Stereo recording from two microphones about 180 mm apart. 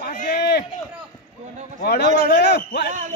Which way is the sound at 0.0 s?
55° left (ahead or behind).